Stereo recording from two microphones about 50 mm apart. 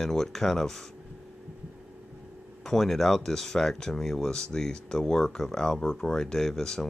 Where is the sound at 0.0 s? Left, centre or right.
Centre.